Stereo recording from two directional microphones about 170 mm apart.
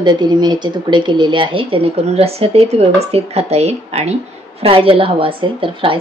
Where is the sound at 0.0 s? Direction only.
25° right (ahead or behind).